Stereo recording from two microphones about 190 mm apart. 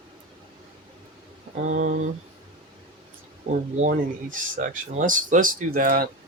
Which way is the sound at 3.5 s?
40° right (ahead or behind).